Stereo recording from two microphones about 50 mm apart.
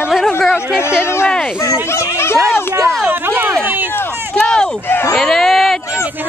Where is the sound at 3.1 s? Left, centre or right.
Right.